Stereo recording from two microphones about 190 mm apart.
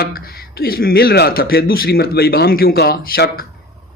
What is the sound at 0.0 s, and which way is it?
Speech, 55° left (ahead or behind).